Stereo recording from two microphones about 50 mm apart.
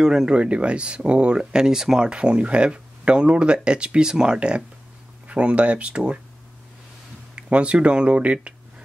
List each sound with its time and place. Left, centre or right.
0.0 s speech: centre
7.3 s speech: right